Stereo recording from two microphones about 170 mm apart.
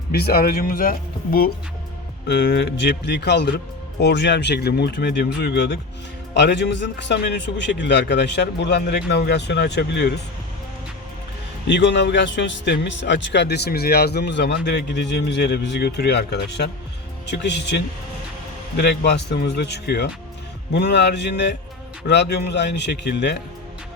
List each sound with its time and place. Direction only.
0.1 s speech: 65° left (ahead or behind)
2.2 s speech: 90° left
4.0 s speech: 90° left
5.0 s speech: 90° left
6.3 s speech: 90° left
11.7 s speech: 90° left
17.2 s speech: 90° left
18.8 s speech: 75° left (ahead or behind)